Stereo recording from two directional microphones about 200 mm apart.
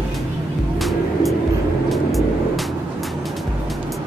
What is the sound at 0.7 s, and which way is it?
Vehicle, centre (ahead or behind).